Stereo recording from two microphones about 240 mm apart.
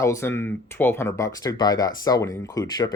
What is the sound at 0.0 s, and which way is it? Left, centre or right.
Speech, centre.